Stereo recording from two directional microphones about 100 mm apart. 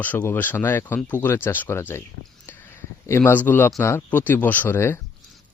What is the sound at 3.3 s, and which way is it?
Speech, 20° left (ahead or behind).